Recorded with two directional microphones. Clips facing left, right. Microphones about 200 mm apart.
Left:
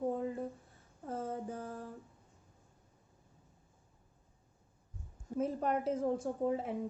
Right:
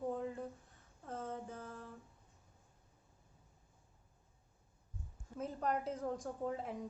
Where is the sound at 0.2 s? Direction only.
5° left (ahead or behind).